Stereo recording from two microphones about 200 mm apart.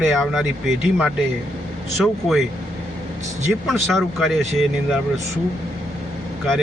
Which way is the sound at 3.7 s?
Centre (ahead or behind).